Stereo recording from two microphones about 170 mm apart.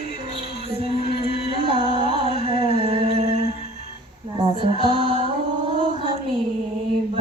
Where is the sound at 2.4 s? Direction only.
35° right (ahead or behind).